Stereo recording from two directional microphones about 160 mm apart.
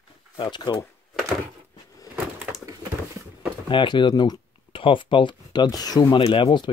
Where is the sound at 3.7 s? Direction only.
30° left (ahead or behind).